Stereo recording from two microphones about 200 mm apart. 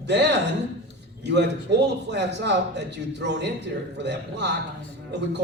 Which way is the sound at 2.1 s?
60° right (ahead or behind).